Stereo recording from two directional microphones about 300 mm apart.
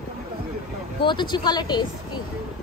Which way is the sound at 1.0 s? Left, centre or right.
Centre.